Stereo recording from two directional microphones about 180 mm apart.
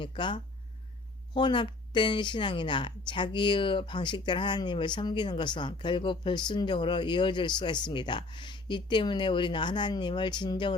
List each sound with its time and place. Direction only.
0.0 s speech: 25° left (ahead or behind)